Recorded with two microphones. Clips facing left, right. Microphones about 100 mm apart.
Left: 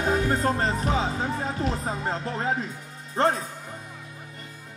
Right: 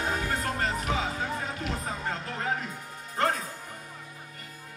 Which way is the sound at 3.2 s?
30° left (ahead or behind).